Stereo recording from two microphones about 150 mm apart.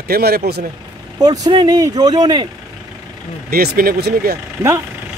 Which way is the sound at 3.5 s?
85° right.